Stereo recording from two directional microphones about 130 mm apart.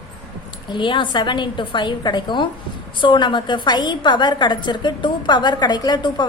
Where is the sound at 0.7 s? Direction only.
35° left (ahead or behind).